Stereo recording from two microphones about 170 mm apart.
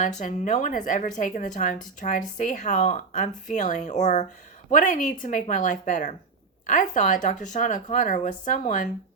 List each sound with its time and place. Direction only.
0.0 s speech: 50° left (ahead or behind)